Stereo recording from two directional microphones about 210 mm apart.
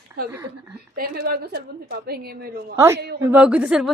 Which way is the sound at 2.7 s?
15° right (ahead or behind).